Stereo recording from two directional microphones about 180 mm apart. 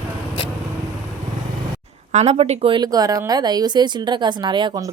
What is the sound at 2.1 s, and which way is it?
Speech, 35° right (ahead or behind).